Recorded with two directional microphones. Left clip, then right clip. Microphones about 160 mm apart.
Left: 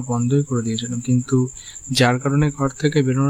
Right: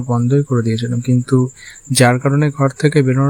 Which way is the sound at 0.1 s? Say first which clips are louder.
Right 5 dB; 20° right (ahead or behind).